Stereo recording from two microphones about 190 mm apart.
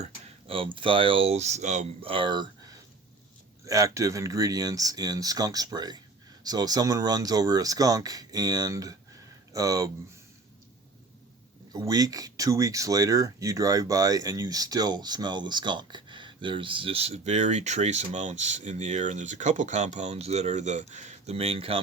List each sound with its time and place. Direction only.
0.0 s speech: 30° right (ahead or behind)
11.7 s speech: 20° right (ahead or behind)